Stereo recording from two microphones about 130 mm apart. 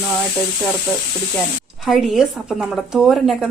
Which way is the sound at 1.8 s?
5° right (ahead or behind).